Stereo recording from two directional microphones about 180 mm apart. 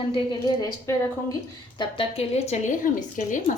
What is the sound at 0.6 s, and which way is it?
Speech, 20° left (ahead or behind).